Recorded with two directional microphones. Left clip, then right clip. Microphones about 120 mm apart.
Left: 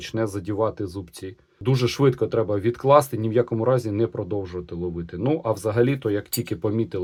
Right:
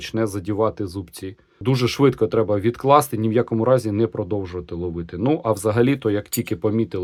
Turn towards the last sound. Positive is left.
turn(degrees=-35)  # may be behind; listen again after turning